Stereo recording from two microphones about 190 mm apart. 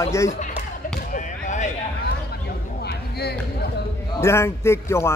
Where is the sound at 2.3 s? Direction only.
55° left (ahead or behind).